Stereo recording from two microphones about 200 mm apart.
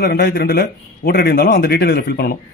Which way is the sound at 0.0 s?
55° left (ahead or behind).